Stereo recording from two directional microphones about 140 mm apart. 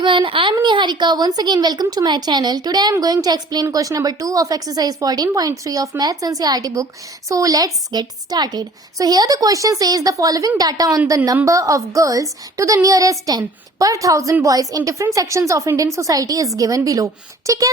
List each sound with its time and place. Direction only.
0.0 s a woman's voice: 35° right (ahead or behind)